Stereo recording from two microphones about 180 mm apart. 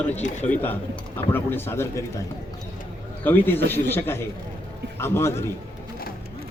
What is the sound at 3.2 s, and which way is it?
A man's voice, 10° left (ahead or behind).